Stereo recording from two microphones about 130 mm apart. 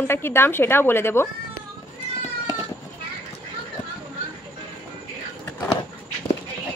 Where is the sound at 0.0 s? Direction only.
20° left (ahead or behind).